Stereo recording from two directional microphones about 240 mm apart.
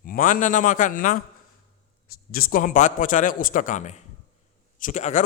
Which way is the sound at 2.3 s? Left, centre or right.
Left.